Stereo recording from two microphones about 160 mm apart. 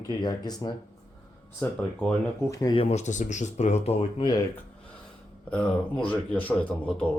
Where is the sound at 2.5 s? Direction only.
20° left (ahead or behind).